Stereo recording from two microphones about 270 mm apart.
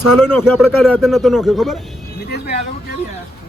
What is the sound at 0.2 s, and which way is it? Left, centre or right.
Speech, centre.